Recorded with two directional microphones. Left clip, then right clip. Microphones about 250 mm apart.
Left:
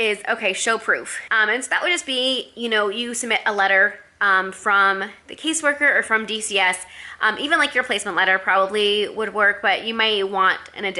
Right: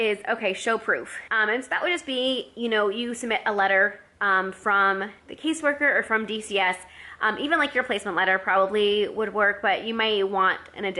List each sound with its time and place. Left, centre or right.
0.0 s a woman's voice: centre